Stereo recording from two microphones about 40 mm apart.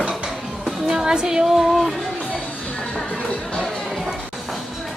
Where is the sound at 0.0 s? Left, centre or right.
Right.